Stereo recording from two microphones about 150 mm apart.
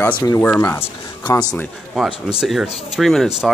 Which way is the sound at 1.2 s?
25° left (ahead or behind).